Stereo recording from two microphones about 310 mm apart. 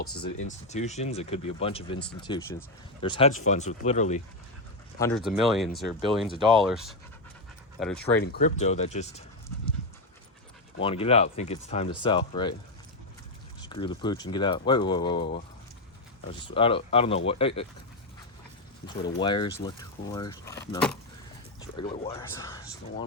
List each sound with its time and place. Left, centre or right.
0.4 s speech: left
4.9 s speech: centre
8.2 s speech: left
10.8 s speech: centre
13.6 s speech: centre
16.4 s speech: centre
19.0 s speech: centre